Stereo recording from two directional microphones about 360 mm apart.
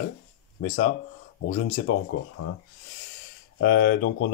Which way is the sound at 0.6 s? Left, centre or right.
Left.